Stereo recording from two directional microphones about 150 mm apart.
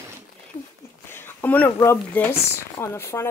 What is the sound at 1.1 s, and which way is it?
Speech, 15° left (ahead or behind).